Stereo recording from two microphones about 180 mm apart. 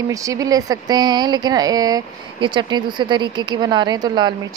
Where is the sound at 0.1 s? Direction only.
20° right (ahead or behind).